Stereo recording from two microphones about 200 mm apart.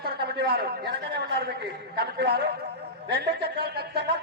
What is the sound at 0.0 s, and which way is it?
A man's voice, 55° right (ahead or behind).